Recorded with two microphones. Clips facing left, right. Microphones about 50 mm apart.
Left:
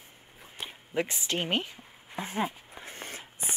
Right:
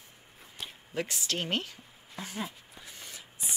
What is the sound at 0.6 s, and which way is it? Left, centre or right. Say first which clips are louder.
Speech: left 4 dB; left.